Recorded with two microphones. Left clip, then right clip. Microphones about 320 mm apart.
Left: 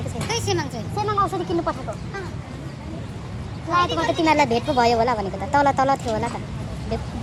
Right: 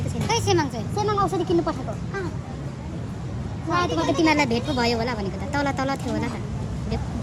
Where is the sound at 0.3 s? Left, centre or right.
Right.